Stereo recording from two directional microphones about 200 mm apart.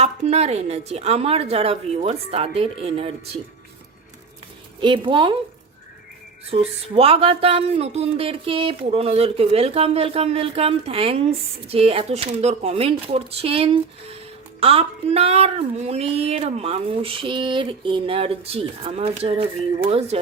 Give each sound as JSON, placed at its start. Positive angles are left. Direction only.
{"t": 0.0, "sound": "a woman's voice", "side_deg": -30}
{"t": 4.8, "sound": "speech", "side_deg": -25}
{"t": 6.4, "sound": "speech", "side_deg": -30}